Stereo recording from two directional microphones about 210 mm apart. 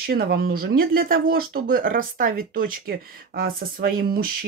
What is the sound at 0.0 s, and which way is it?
Speech, 45° right (ahead or behind).